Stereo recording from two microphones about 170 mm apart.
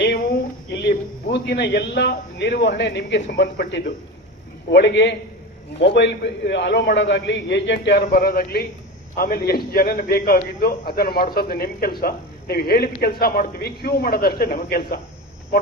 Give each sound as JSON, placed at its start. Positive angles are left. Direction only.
{"t": 0.7, "sound": "a man's voice", "side_deg": 80}
{"t": 4.7, "sound": "a man's voice", "side_deg": 90}